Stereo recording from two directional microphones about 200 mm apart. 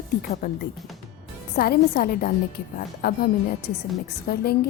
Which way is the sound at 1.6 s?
50° left (ahead or behind).